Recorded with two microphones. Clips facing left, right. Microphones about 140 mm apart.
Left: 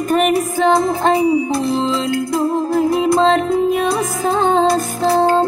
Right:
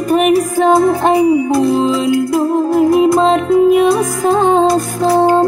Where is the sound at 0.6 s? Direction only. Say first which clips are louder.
Right 3 dB; 10° right (ahead or behind).